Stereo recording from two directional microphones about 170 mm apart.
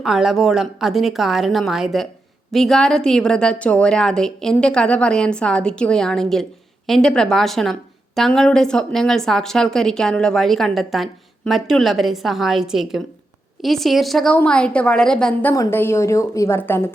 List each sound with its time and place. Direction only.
0.0 s a woman's voice: centre (ahead or behind)